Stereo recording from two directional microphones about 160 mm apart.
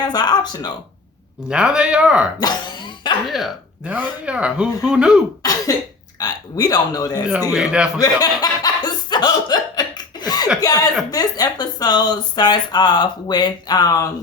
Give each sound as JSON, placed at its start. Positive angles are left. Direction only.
{"t": 0.0, "sound": "speech", "side_deg": 25}
{"t": 1.5, "sound": "speech", "side_deg": -5}
{"t": 2.4, "sound": "cough", "side_deg": 30}
{"t": 3.2, "sound": "speech", "side_deg": 0}
{"t": 5.4, "sound": "cough", "side_deg": 25}
{"t": 6.1, "sound": "speech", "side_deg": 25}
{"t": 7.5, "sound": "speech", "side_deg": -5}
{"t": 7.9, "sound": "chuckle", "side_deg": 25}
{"t": 10.6, "sound": "speech", "side_deg": 25}